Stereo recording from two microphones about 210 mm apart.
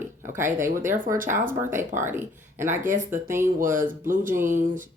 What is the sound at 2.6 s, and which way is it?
Speech, 35° right (ahead or behind).